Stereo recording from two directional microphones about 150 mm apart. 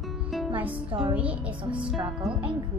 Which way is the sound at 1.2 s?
10° right (ahead or behind).